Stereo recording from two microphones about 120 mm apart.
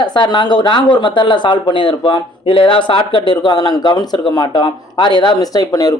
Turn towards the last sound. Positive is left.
turn(degrees=35)  # may be behind; listen again after turning